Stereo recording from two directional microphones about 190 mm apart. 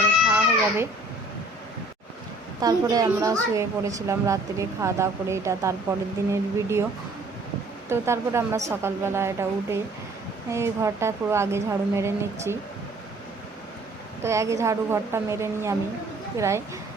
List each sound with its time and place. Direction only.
0.3 s a sound: 5° right (ahead or behind)
2.6 s a woman's voice: 20° right (ahead or behind)
7.9 s a woman's voice: 15° right (ahead or behind)
14.3 s a woman's voice: 15° right (ahead or behind)